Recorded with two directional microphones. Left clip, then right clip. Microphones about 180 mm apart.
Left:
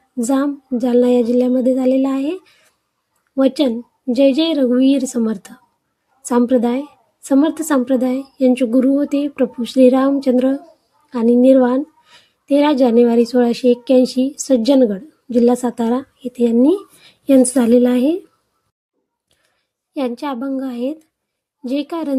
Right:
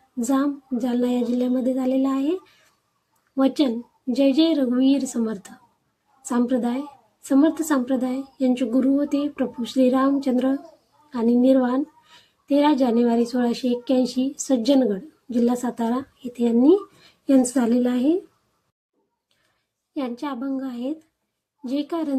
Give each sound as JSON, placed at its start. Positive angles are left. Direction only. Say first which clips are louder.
{"t": 0.2, "sound": "a woman's voice", "louder": "left 5 dB", "side_deg": 30}
{"t": 19.9, "sound": "a woman's voice", "louder": "left 7 dB", "side_deg": 35}